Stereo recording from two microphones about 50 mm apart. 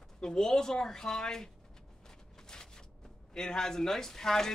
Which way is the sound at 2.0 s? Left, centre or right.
Centre.